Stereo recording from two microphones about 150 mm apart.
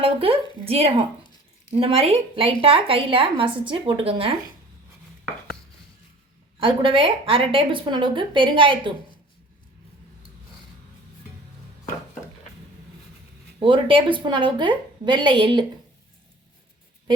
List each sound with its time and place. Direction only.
0.0 s a woman's voice: 40° right (ahead or behind)
6.6 s a woman's voice: 35° right (ahead or behind)
13.6 s a woman's voice: 35° right (ahead or behind)